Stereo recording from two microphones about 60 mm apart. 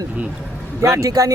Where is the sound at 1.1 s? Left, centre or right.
Right.